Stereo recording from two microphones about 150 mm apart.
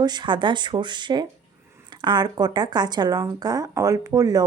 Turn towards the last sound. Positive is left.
turn(degrees=-20)  # may be behind; listen again after turning